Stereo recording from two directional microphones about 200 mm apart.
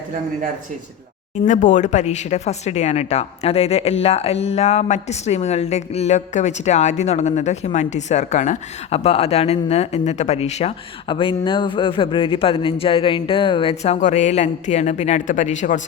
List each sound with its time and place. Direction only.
1.5 s a woman's voice: 40° left (ahead or behind)